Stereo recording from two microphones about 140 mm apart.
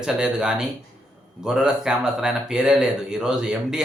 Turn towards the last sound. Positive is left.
turn(degrees=-5)  # may be behind; listen again after turning